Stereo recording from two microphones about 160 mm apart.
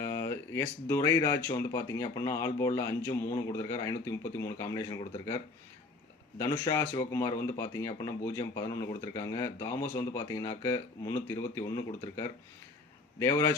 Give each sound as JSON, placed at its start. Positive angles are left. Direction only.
{"t": 0.0, "sound": "speech", "side_deg": 15}
{"t": 6.4, "sound": "speech", "side_deg": 25}
{"t": 13.1, "sound": "speech", "side_deg": 20}